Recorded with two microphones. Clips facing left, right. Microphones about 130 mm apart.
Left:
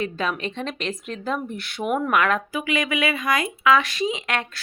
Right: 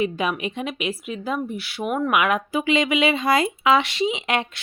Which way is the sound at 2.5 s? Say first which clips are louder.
Right 4 dB; 25° right (ahead or behind).